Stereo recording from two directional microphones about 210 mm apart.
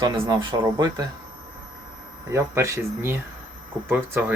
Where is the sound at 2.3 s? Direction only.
15° right (ahead or behind).